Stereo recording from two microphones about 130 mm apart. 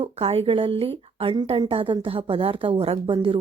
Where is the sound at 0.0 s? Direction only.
50° right (ahead or behind).